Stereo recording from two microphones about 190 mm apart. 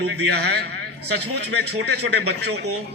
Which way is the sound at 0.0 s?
60° right (ahead or behind).